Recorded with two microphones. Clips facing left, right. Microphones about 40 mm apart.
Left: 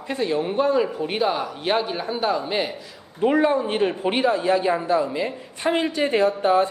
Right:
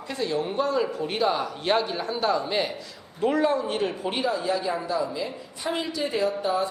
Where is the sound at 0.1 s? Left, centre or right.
Left.